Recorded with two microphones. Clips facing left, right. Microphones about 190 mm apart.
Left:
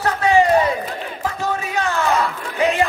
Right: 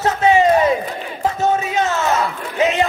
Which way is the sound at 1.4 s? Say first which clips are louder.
Right 5 dB; 20° right (ahead or behind).